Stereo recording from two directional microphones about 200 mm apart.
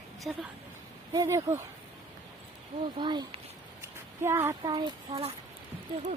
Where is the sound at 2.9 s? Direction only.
25° right (ahead or behind).